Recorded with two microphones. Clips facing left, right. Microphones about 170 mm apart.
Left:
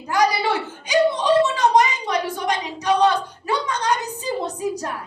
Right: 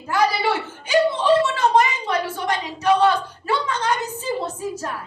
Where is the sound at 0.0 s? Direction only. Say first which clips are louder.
Even; 15° left (ahead or behind).